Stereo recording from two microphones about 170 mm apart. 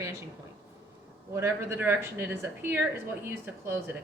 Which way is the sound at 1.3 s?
15° right (ahead or behind).